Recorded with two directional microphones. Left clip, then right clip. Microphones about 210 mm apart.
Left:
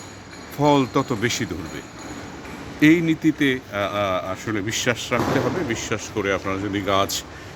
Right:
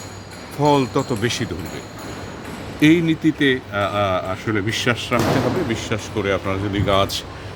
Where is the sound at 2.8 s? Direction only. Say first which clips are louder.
Right 1 dB; 5° left (ahead or behind).